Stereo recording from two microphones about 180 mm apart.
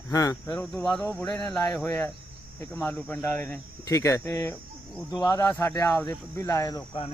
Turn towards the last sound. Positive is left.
turn(degrees=15)  # may be behind; listen again after turning